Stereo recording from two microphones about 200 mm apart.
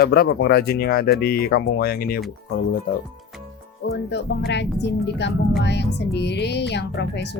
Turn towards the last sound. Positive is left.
turn(degrees=60)  # may be behind; listen again after turning